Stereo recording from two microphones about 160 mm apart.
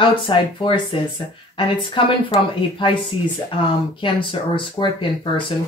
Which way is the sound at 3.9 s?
30° left (ahead or behind).